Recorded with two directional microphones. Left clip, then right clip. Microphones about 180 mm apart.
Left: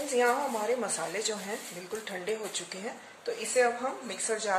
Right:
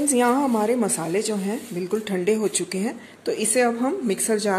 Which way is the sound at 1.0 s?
30° right (ahead or behind).